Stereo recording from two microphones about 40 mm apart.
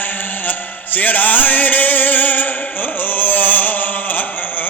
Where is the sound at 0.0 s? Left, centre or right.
Left.